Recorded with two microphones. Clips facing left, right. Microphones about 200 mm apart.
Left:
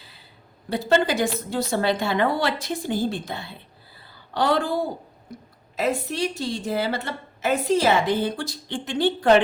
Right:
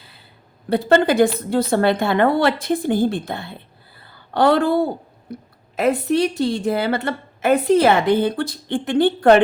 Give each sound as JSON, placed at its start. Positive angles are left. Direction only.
{"t": 0.7, "sound": "a woman's voice", "side_deg": -55}